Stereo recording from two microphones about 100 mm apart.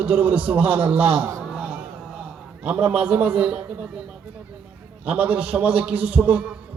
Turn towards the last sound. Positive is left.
turn(degrees=-15)  # may be behind; listen again after turning